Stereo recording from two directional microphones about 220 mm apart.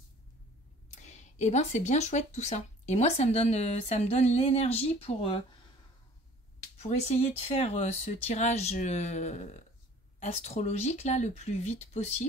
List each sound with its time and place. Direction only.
0.8 s speech: 35° left (ahead or behind)
6.8 s speech: 30° left (ahead or behind)